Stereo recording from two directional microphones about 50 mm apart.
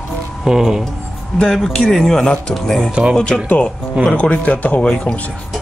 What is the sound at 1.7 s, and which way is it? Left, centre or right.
Speech, centre.